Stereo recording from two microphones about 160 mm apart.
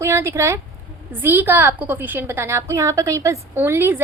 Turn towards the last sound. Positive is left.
turn(degrees=-15)  # may be behind; listen again after turning